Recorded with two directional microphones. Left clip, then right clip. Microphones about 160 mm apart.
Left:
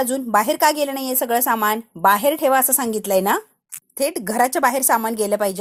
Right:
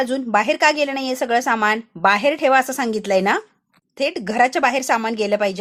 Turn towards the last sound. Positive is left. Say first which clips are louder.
# right 1 dB
turn(degrees=35)  # may be behind; listen again after turning